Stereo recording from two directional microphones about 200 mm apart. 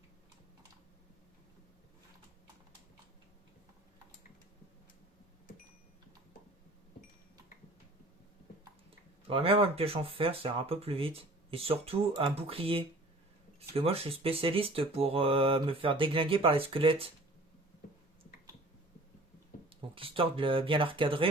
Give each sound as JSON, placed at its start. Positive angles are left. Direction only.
{"t": 9.2, "sound": "speech", "side_deg": -25}
{"t": 19.7, "sound": "speech", "side_deg": -25}